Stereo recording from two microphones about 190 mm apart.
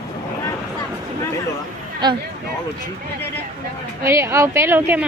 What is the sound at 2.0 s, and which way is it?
Speech, 20° right (ahead or behind).